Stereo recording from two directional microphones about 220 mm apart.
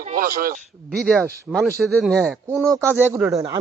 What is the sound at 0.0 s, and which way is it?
Speech, 40° right (ahead or behind).